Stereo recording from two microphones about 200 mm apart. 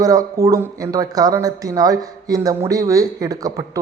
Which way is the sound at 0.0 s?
15° right (ahead or behind).